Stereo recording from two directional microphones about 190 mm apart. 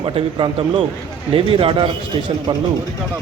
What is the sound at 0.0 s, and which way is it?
A man's voice, 30° right (ahead or behind).